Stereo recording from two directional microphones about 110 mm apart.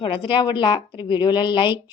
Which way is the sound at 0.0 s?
50° left (ahead or behind).